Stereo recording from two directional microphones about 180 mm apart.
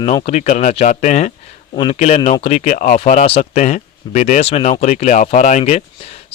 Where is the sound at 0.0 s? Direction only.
35° left (ahead or behind).